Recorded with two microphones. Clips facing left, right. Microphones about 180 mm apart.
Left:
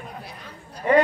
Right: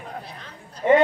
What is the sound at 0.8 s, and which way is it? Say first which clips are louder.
Speech: right 2 dB; 25° right (ahead or behind).